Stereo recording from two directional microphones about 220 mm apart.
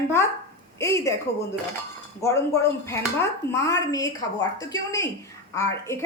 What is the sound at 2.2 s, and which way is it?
A woman's voice, 10° left (ahead or behind).